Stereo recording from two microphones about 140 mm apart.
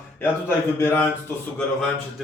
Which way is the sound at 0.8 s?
15° left (ahead or behind).